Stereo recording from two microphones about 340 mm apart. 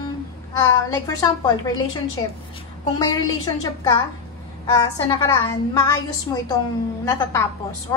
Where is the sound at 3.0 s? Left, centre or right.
Centre.